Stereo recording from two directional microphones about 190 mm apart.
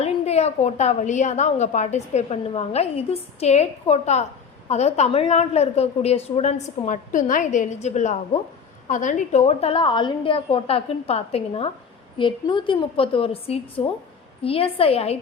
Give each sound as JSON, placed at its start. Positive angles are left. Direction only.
{"t": 0.0, "sound": "a woman's voice", "side_deg": 35}